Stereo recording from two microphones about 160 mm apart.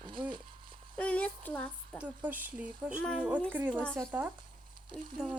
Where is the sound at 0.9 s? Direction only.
10° left (ahead or behind).